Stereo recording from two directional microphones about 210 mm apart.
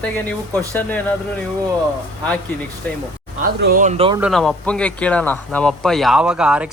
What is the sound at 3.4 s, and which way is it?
Speech, 45° right (ahead or behind).